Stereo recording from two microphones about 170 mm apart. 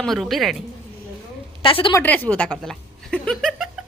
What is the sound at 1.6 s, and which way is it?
Speech, 30° left (ahead or behind).